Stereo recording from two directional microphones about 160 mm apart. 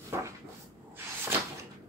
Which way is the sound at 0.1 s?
15° right (ahead or behind).